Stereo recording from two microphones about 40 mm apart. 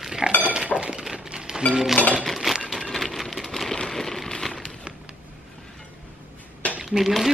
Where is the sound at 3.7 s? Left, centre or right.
Centre.